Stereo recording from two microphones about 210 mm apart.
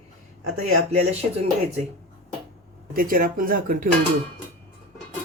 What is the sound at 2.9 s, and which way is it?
Speech, 40° right (ahead or behind).